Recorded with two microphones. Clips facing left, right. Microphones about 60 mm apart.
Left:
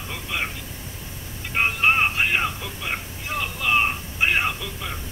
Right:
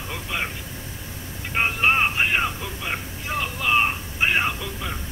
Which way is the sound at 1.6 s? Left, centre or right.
Centre.